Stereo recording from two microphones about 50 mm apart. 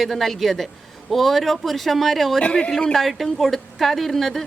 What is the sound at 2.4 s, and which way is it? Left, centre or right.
Speech, left.